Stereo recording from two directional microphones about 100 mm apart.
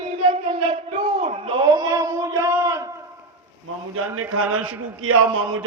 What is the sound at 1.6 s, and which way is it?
A man's voice, 35° right (ahead or behind).